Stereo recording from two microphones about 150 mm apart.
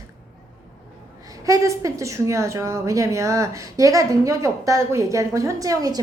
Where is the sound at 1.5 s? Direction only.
20° right (ahead or behind).